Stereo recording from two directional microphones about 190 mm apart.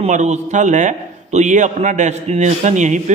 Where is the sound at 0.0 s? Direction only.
35° right (ahead or behind).